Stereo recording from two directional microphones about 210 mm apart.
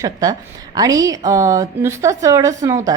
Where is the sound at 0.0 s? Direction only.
15° right (ahead or behind).